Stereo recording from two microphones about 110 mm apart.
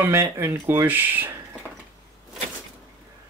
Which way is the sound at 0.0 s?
25° right (ahead or behind).